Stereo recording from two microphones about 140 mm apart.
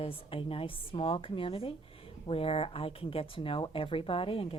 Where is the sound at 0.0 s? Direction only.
40° left (ahead or behind).